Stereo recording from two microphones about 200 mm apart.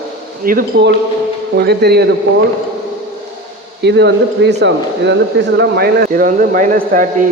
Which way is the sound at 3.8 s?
60° right (ahead or behind).